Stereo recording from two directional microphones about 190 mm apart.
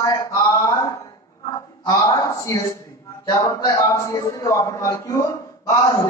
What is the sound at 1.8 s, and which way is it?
Speech, 20° left (ahead or behind).